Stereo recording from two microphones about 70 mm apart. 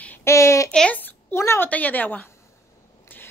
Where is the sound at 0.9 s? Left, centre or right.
Left.